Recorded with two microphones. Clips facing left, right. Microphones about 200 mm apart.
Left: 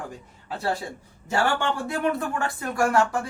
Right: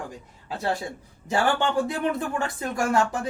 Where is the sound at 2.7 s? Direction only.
20° right (ahead or behind).